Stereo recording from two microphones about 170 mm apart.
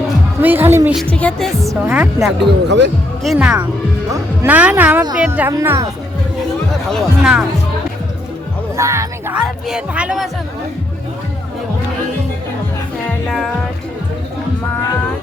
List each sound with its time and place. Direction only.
0.4 s speech: 10° right (ahead or behind)
1.1 s speech: 5° left (ahead or behind)
1.6 s speech: 10° right (ahead or behind)
2.6 s speech: 90° right
3.2 s speech: 5° right (ahead or behind)
6.8 s speech: centre (ahead or behind)
8.7 s speech: 15° right (ahead or behind)
9.4 s speech: 5° right (ahead or behind)
13.1 s music: centre (ahead or behind)